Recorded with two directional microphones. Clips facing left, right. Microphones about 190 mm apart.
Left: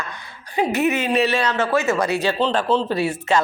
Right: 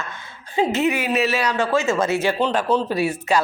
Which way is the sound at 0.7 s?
15° right (ahead or behind).